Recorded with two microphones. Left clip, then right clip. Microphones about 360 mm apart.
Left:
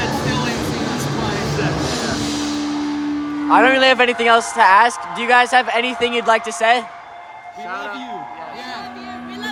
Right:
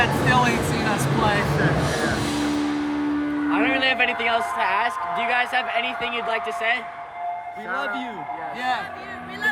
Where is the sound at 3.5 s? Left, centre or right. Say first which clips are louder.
Left 10 dB; centre.